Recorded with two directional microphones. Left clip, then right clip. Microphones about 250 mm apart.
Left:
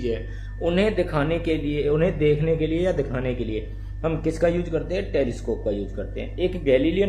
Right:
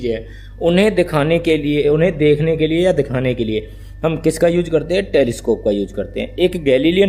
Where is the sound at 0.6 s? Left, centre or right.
Right.